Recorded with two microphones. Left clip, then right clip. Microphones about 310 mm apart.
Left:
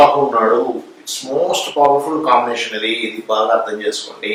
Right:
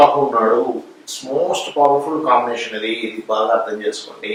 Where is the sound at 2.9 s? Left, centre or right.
Right.